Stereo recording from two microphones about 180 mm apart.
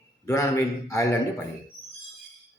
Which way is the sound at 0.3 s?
15° left (ahead or behind).